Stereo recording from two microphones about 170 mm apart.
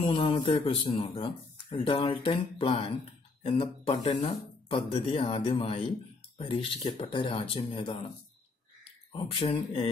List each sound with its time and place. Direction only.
0.0 s speech: 30° left (ahead or behind)
9.1 s speech: 25° left (ahead or behind)